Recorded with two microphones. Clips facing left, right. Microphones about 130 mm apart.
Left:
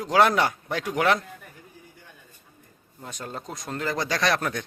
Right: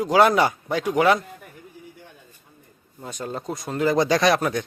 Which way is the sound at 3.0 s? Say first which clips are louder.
Right 5 dB; centre (ahead or behind).